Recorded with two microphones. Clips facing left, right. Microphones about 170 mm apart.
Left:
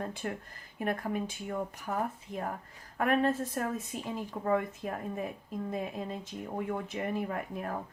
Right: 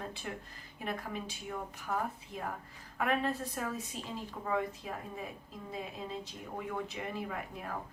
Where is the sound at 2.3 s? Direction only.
50° left (ahead or behind).